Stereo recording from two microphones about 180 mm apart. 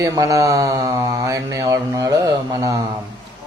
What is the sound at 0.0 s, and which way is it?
A man's voice, 20° right (ahead or behind).